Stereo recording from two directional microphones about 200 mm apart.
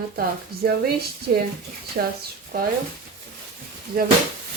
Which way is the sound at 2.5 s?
40° right (ahead or behind).